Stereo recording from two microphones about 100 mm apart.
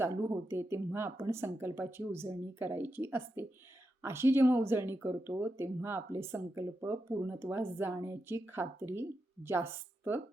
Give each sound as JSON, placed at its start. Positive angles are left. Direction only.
{"t": 0.0, "sound": "speech", "side_deg": -25}